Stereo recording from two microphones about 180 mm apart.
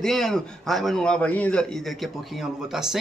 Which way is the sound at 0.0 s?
Centre (ahead or behind).